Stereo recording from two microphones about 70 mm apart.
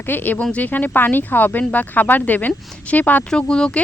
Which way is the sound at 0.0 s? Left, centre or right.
Left.